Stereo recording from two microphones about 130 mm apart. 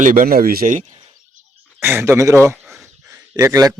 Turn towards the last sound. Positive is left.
turn(degrees=-25)  # may be behind; listen again after turning